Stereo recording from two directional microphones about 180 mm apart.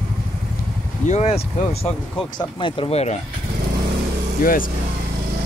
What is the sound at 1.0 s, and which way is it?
Speech, 40° left (ahead or behind).